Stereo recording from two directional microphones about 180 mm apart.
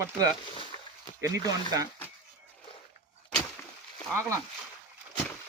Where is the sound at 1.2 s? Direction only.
20° right (ahead or behind).